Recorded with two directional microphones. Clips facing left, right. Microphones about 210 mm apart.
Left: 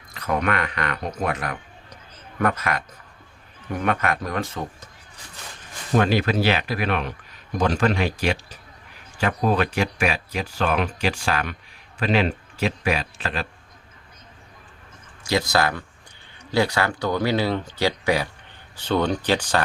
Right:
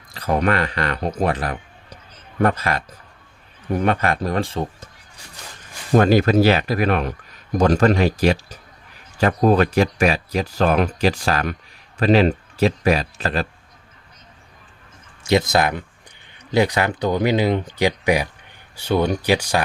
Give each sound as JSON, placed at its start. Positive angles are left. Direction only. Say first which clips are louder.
{"t": 0.1, "sound": "a man's voice", "louder": "right 4 dB", "side_deg": -30}
{"t": 5.9, "sound": "speech", "louder": "right 5 dB", "side_deg": -45}
{"t": 15.2, "sound": "speech", "louder": "right 4 dB", "side_deg": -20}